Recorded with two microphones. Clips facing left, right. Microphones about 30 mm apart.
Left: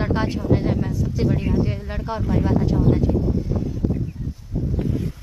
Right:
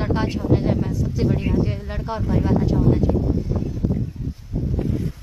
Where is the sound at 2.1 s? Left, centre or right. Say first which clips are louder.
Even; centre.